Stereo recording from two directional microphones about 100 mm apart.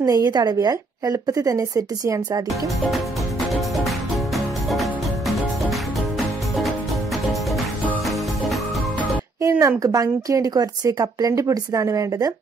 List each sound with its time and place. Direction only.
0.0 s speech: 40° right (ahead or behind)
9.4 s speech: 30° right (ahead or behind)